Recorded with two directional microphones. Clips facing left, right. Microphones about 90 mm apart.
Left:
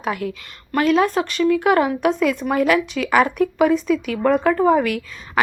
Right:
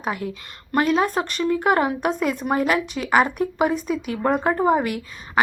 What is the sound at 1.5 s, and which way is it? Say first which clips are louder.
Speech: even; 40° right (ahead or behind).